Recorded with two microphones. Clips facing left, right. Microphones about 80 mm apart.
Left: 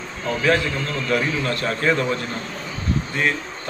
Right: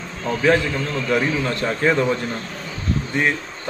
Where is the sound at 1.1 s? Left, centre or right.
Right.